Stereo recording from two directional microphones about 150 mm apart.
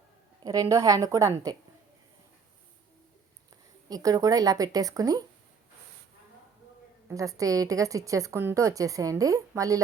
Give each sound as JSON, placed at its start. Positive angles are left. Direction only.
{"t": 0.4, "sound": "a woman's voice", "side_deg": -25}
{"t": 3.8, "sound": "a woman's voice", "side_deg": -25}
{"t": 7.1, "sound": "a woman's voice", "side_deg": -20}